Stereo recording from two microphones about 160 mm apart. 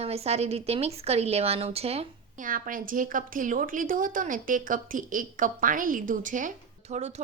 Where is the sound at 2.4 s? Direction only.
60° right (ahead or behind).